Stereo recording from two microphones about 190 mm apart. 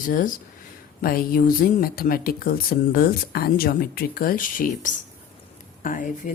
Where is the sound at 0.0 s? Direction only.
45° left (ahead or behind).